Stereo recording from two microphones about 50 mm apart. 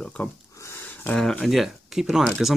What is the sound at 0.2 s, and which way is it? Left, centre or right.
Speech, left.